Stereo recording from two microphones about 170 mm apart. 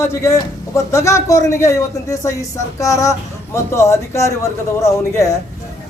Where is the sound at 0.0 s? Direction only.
15° left (ahead or behind).